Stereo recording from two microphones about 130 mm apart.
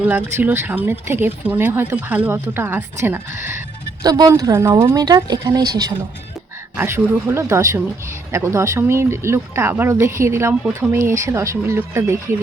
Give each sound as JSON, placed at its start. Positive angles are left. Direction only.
{"t": 0.0, "sound": "speech", "side_deg": -15}
{"t": 4.0, "sound": "speech", "side_deg": -30}
{"t": 6.7, "sound": "speech", "side_deg": -20}